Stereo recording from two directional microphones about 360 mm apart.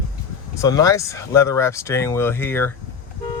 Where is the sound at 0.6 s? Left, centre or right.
Centre.